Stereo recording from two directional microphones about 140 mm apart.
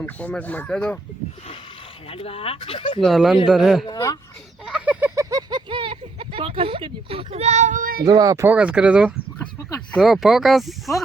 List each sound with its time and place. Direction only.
0.0 s speech: 10° left (ahead or behind)
2.0 s speech: 45° left (ahead or behind)
3.0 s speech: centre (ahead or behind)
3.8 s speech: 25° left (ahead or behind)
4.6 s a sound: 5° right (ahead or behind)
5.2 s speech: 30° right (ahead or behind); by 8.0 s 80° right
8.0 s speech: 25° right (ahead or behind)
8.4 s speech: 10° right (ahead or behind)